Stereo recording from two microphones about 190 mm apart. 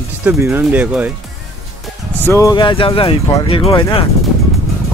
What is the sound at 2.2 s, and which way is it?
Speech, 15° left (ahead or behind).